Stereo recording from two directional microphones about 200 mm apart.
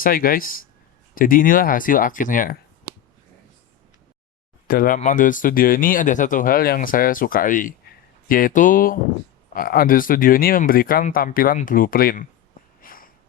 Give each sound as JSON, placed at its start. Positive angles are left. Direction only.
{"t": 0.0, "sound": "speech", "side_deg": 45}
{"t": 4.7, "sound": "speech", "side_deg": 45}
{"t": 12.8, "sound": "a sound", "side_deg": 45}